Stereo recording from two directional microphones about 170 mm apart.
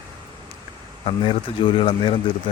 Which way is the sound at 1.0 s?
30° left (ahead or behind).